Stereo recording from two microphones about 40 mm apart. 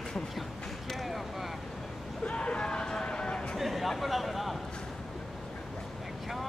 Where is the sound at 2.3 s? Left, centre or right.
Left.